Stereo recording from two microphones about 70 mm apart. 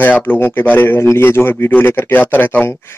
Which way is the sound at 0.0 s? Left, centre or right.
Left.